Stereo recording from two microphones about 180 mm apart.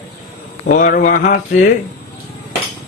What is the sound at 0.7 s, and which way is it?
A man's voice, 45° left (ahead or behind).